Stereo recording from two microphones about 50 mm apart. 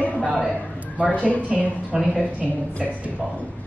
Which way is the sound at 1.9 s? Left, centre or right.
Centre.